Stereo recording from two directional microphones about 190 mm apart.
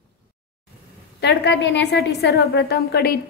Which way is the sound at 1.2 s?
65° left (ahead or behind).